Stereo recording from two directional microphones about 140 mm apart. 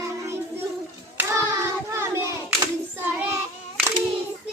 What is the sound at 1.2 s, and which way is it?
Hands, 20° right (ahead or behind).